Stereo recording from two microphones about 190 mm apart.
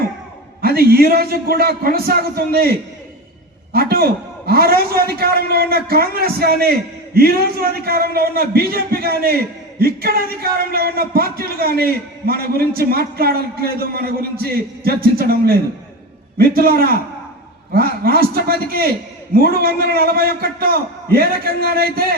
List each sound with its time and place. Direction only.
0.6 s a man's voice: 55° right (ahead or behind)